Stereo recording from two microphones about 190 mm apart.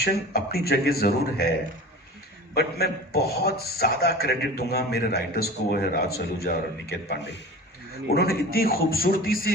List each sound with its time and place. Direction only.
0.0 s speech: 55° left (ahead or behind)
2.6 s a man's voice: 55° left (ahead or behind)